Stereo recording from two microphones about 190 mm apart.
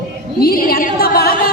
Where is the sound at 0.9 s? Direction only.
55° left (ahead or behind).